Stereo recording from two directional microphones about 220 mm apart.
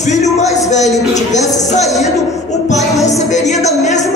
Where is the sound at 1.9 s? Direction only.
Centre (ahead or behind).